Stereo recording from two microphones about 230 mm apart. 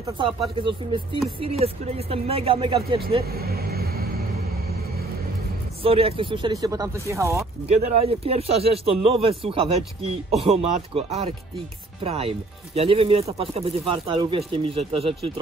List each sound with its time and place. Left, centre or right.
0.6 s speech: right
3.3 s vehicle: right
5.8 s speech: right
7.6 s speech: right